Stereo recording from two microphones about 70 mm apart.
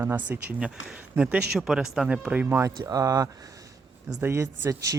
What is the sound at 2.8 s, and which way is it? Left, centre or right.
Speech, right.